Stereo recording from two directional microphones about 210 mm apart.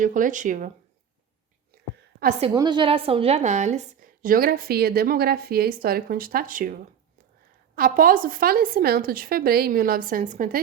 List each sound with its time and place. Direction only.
0.0 s speech: 40° right (ahead or behind)
1.7 s a sound: 45° right (ahead or behind)
2.5 s speech: 20° right (ahead or behind); by 6.7 s 40° right (ahead or behind)
7.8 s speech: 40° right (ahead or behind)